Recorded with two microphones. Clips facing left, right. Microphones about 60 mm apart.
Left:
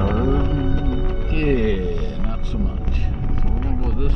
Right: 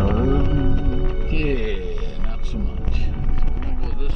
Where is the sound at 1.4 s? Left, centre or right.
Left.